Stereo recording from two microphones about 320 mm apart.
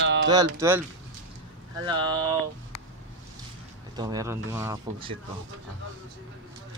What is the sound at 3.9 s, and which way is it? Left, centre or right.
Speech, centre.